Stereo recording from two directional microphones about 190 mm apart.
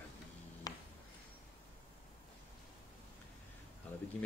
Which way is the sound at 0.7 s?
20° left (ahead or behind).